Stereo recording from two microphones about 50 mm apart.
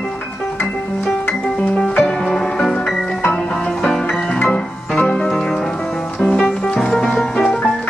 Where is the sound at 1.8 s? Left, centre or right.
Centre.